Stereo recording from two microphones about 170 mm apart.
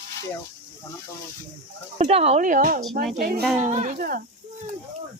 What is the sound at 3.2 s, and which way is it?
Speech, 65° right (ahead or behind).